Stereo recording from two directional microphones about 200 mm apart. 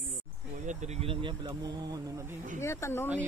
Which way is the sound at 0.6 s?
35° right (ahead or behind).